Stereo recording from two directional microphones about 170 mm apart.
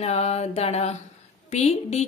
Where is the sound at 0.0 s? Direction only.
40° left (ahead or behind).